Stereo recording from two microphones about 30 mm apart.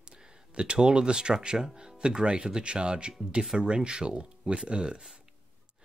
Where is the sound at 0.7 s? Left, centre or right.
Right.